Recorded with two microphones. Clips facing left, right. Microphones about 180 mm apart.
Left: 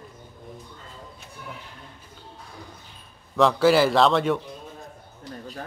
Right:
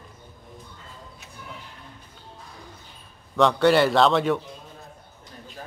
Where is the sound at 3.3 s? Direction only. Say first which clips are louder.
Even; centre (ahead or behind).